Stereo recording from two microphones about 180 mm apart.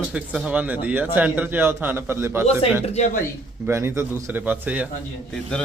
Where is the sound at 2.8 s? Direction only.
35° left (ahead or behind).